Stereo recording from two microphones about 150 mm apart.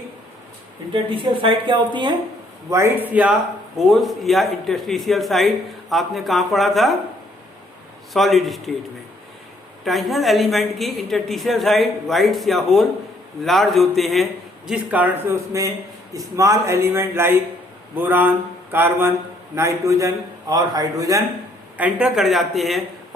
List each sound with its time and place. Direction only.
1.1 s a woman's voice: 35° right (ahead or behind)
2.6 s a sound: 20° right (ahead or behind)
3.8 s speech: centre (ahead or behind)
8.1 s speech: centre (ahead or behind)
9.8 s speech: centre (ahead or behind)
14.7 s a sound: 10° right (ahead or behind)
16.1 s speech: 20° right (ahead or behind)
17.9 s a sound: 15° right (ahead or behind)
19.5 s speech: 20° right (ahead or behind)
21.8 s speech: 5° right (ahead or behind)